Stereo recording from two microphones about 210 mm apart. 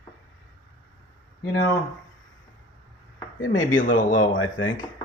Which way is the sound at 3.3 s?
40° left (ahead or behind).